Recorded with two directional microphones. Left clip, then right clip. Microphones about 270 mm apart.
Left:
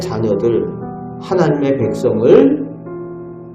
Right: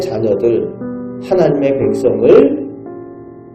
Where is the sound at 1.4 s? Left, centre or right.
Centre.